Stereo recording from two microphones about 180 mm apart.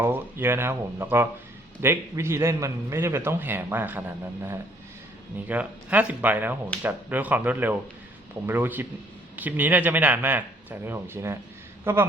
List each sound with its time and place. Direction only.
0.0 s a man's voice: 10° right (ahead or behind)
5.5 s a man's voice: 10° right (ahead or behind)